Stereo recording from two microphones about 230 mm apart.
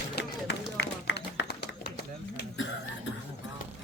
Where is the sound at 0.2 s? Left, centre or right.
Left.